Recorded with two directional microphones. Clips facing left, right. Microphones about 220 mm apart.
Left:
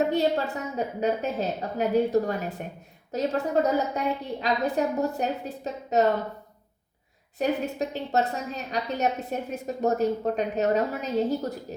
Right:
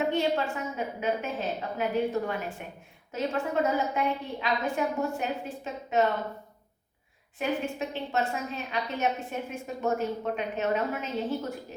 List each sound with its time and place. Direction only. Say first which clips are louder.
0.1 s a woman's voice: left 3 dB; 40° left (ahead or behind)
7.3 s a woman's voice: left 4 dB; 40° left (ahead or behind)